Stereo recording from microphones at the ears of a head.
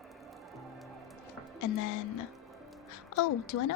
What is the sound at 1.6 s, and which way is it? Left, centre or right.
A child's voice, left.